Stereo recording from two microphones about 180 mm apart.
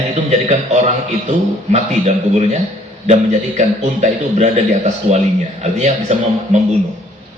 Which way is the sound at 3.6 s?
40° right (ahead or behind).